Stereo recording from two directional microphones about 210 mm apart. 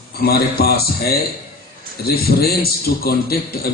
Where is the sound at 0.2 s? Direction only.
50° left (ahead or behind).